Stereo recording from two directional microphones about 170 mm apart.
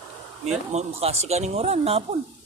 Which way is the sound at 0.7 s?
40° right (ahead or behind).